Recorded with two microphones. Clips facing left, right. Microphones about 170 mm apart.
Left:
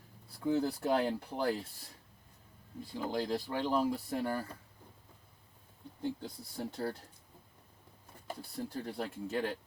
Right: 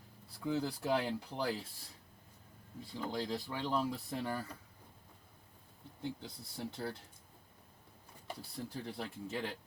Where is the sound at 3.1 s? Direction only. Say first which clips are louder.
Left 5 dB; 55° left (ahead or behind).